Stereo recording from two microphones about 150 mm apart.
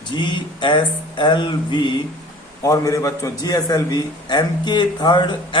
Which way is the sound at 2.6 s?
20° left (ahead or behind).